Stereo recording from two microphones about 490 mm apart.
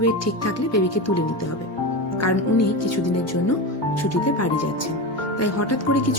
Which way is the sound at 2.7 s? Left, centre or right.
Left.